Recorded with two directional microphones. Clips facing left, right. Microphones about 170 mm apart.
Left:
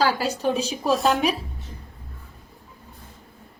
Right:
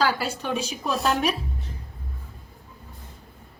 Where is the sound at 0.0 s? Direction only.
35° left (ahead or behind).